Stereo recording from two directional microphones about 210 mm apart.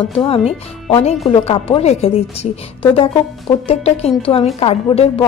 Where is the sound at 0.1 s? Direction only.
25° left (ahead or behind).